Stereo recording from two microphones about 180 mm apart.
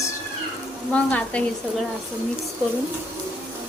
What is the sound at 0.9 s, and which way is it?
Speech, 5° left (ahead or behind).